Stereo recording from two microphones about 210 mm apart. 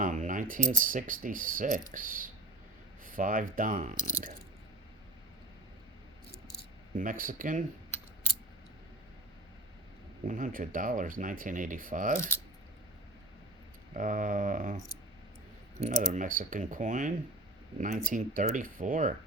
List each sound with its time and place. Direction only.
0.0 s a sound: 35° right (ahead or behind)
0.7 s speech: 40° right (ahead or behind)
6.9 s speech: 40° right (ahead or behind)
10.2 s speech: 35° right (ahead or behind)
13.9 s speech: 40° right (ahead or behind)
15.8 s speech: 35° right (ahead or behind)